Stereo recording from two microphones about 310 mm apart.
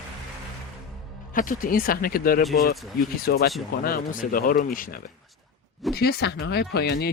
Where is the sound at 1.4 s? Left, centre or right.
Left.